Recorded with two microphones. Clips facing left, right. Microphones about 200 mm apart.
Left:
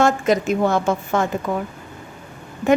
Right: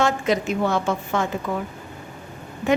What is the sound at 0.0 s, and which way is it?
A woman's voice, 45° left (ahead or behind).